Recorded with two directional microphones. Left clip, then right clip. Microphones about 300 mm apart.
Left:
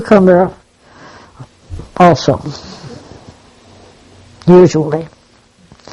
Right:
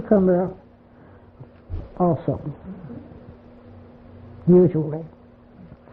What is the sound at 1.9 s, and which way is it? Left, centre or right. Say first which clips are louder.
Speech: left 14 dB; left.